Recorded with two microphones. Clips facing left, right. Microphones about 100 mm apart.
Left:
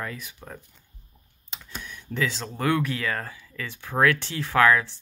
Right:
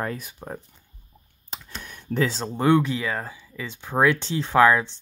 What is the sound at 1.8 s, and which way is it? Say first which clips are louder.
Computer keyboard: right 4 dB; 40° right (ahead or behind).